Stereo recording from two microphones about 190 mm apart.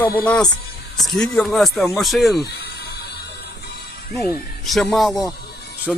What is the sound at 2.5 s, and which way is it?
Music, 60° left (ahead or behind).